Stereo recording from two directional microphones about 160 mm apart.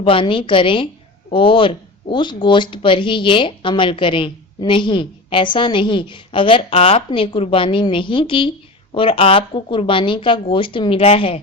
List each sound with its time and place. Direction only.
0.0 s speech: 35° left (ahead or behind)